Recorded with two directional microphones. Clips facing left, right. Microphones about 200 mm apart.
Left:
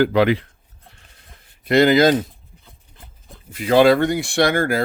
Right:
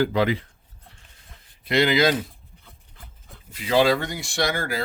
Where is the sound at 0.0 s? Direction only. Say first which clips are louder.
Left 5 dB; 70° left (ahead or behind).